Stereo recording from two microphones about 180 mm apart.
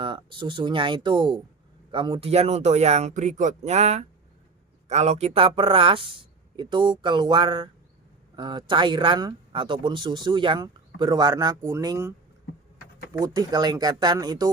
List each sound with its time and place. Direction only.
0.0 s speech: 30° right (ahead or behind)
13.1 s speech: 20° right (ahead or behind)